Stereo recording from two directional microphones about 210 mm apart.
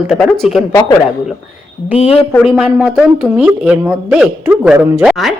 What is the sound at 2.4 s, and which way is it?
Speech, centre (ahead or behind).